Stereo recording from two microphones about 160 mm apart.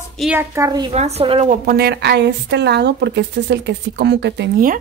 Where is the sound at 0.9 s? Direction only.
40° right (ahead or behind).